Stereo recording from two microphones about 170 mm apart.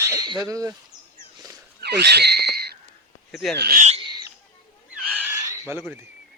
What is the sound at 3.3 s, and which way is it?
Speech, centre (ahead or behind).